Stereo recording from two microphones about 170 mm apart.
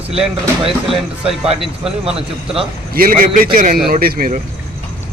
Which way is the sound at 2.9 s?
55° right (ahead or behind).